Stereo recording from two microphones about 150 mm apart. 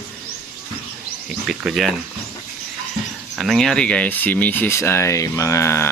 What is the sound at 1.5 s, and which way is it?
Speech, centre (ahead or behind).